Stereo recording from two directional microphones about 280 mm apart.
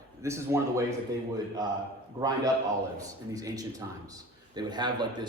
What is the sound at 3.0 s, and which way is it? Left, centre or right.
A man's voice, centre.